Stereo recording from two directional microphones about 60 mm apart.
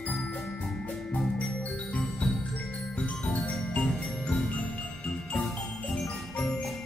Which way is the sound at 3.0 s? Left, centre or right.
Left.